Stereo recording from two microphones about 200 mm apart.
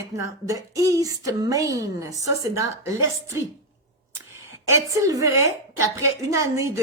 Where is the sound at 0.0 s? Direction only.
15° right (ahead or behind).